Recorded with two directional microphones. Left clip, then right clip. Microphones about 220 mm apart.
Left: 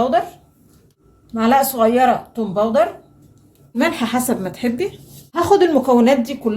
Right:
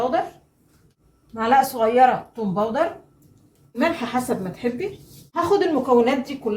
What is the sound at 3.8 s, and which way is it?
A woman's voice, 55° left (ahead or behind).